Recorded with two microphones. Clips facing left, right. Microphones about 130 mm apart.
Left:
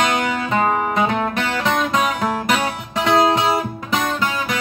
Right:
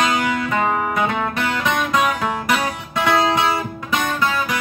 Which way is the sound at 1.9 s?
20° left (ahead or behind).